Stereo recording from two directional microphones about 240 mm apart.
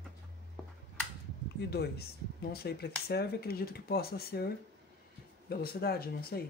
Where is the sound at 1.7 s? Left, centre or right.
Left.